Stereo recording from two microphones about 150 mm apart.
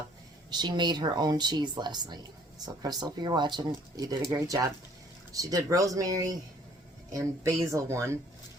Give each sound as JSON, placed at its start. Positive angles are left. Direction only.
{"t": 0.5, "sound": "speech", "side_deg": -30}